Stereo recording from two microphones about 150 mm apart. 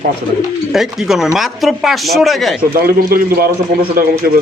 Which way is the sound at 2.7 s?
85° right.